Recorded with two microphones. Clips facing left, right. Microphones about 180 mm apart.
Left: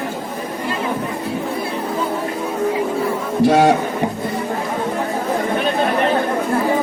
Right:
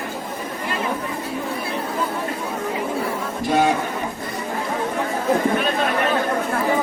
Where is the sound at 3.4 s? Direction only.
75° left (ahead or behind).